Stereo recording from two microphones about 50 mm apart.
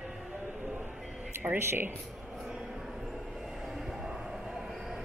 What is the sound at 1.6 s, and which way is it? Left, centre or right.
Speech, right.